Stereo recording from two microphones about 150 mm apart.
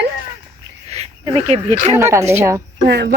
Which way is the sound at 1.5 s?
45° right (ahead or behind).